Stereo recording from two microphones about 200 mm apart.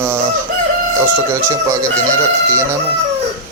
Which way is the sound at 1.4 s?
15° right (ahead or behind).